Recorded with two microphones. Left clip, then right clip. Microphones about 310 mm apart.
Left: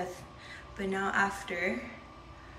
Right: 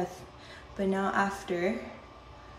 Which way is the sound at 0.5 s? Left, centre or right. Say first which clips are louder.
Right 4 dB; centre.